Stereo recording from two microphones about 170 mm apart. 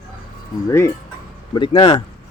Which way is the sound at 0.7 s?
15° left (ahead or behind).